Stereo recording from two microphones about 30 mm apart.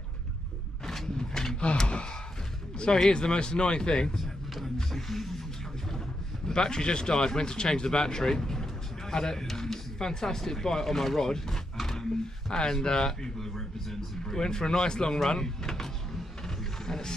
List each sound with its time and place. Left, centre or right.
1.1 s speech: centre
1.9 s speech: left
5.0 s speech: centre
6.5 s speech: left
11.8 s a sound: centre
12.4 s speech: left
13.4 s a sound: centre
14.2 s speech: centre
15.2 s power windows: centre
16.4 s a sound: centre